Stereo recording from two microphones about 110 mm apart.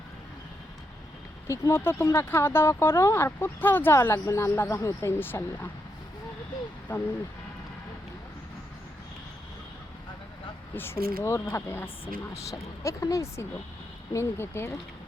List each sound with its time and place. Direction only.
1.5 s speech: 25° left (ahead or behind)
6.9 s speech: 20° left (ahead or behind)
10.8 s speech: 20° left (ahead or behind)